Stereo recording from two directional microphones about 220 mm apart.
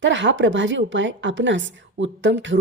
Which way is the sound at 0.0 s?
55° right (ahead or behind).